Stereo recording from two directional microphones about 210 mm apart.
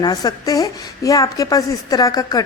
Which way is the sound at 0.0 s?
20° left (ahead or behind).